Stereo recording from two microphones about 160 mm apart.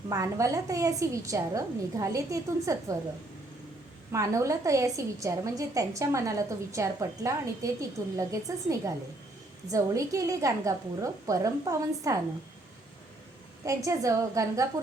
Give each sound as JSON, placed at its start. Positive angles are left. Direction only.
{"t": 0.1, "sound": "a woman's voice", "side_deg": -20}
{"t": 4.1, "sound": "a woman's voice", "side_deg": -20}
{"t": 13.7, "sound": "a woman's voice", "side_deg": -20}